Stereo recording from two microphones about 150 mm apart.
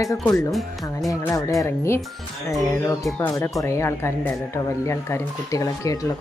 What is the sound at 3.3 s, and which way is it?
Speech, 20° left (ahead or behind).